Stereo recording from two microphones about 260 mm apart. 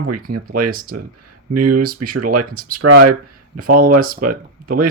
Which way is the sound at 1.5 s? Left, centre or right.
Right.